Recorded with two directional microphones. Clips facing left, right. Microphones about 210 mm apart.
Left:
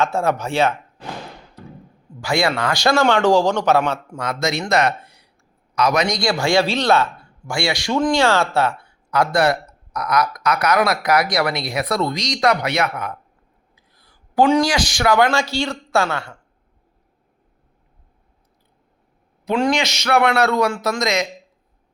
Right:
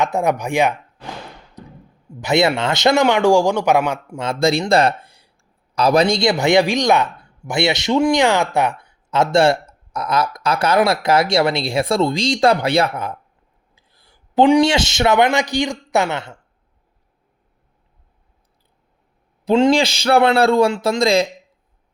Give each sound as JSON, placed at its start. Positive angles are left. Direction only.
{"t": 0.0, "sound": "a man's voice", "side_deg": -15}
{"t": 1.6, "sound": "thump", "side_deg": -20}
{"t": 2.2, "sound": "a man's voice", "side_deg": -20}
{"t": 4.2, "sound": "speech", "side_deg": -30}
{"t": 19.5, "sound": "speech", "side_deg": -25}